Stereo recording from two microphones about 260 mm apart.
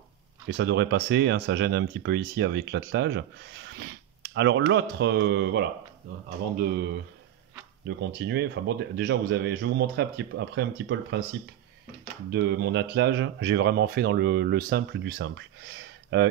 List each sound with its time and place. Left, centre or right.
0.5 s speech: right
8.0 s speech: right
12.3 s speech: right